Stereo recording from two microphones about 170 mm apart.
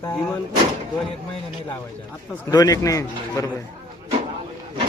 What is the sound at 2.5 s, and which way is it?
Speech, 20° left (ahead or behind).